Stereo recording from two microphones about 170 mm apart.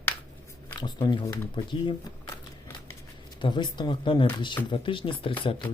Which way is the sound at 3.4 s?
25° left (ahead or behind).